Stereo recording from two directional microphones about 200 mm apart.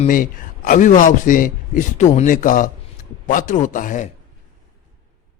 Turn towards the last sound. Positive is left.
turn(degrees=40)  # may be behind; listen again after turning